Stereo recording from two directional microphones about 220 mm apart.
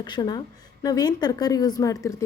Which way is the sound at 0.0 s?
20° left (ahead or behind).